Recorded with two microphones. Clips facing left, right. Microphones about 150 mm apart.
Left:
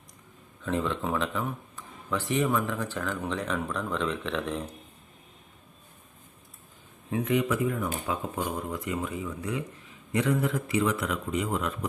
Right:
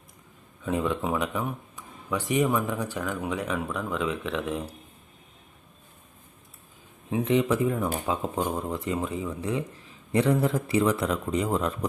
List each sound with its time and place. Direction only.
0.6 s speech: 10° right (ahead or behind)
7.1 s speech: 25° right (ahead or behind)